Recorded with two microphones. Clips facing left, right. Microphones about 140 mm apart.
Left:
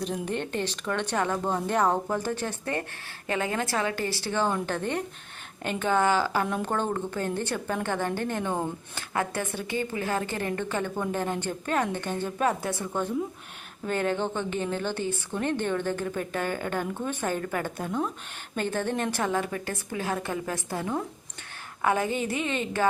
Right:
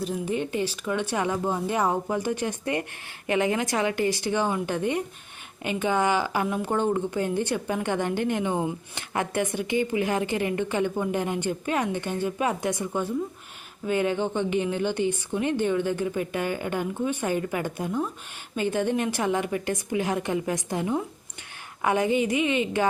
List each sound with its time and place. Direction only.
0.0 s a woman's voice: 5° right (ahead or behind)